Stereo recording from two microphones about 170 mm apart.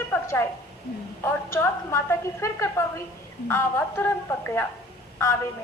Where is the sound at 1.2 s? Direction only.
15° left (ahead or behind).